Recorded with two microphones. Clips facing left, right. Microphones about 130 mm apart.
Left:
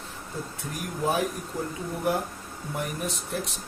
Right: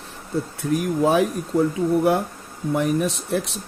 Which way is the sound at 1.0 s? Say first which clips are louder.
Right 5 dB; 90° right.